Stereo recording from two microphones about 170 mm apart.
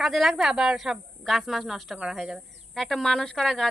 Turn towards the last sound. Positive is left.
turn(degrees=0)  # may be behind; listen again after turning